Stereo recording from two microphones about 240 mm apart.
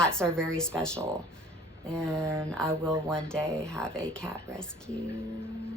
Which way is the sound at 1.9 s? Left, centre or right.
Centre.